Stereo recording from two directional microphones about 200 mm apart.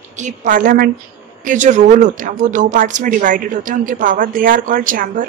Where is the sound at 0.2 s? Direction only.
40° right (ahead or behind).